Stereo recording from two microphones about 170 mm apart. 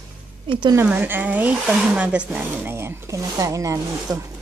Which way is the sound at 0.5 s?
25° right (ahead or behind).